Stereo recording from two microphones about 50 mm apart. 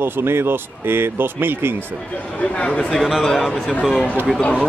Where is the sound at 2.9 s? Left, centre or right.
Centre.